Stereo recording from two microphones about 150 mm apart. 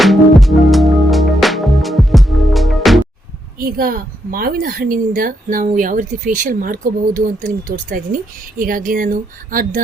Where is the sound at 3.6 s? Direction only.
80° right.